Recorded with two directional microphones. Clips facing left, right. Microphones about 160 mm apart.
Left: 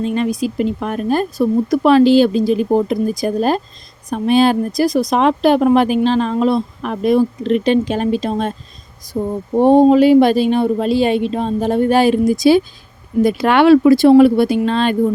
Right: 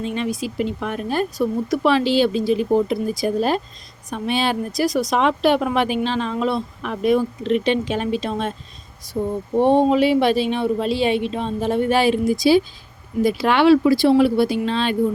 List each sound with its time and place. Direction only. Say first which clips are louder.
0.0 s speech: left 6 dB; 45° left (ahead or behind)
9.6 s speech: left 6 dB; 45° left (ahead or behind)